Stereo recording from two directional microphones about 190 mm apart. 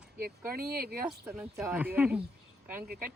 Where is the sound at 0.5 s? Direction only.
50° right (ahead or behind).